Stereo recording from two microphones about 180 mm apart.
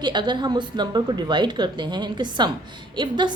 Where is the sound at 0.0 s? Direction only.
25° right (ahead or behind).